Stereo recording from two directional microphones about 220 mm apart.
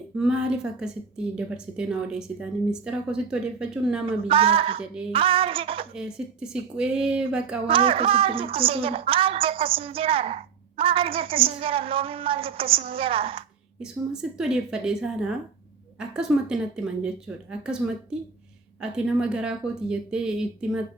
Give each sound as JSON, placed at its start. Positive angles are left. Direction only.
{"t": 0.2, "sound": "a woman's voice", "side_deg": -5}
{"t": 4.3, "sound": "a woman's voice", "side_deg": -25}
{"t": 5.9, "sound": "a woman's voice", "side_deg": -5}
{"t": 7.7, "sound": "a woman's voice", "side_deg": -25}
{"t": 13.7, "sound": "a woman's voice", "side_deg": -5}